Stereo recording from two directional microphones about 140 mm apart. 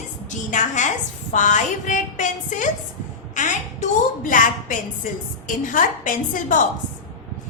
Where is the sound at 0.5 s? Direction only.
60° left (ahead or behind).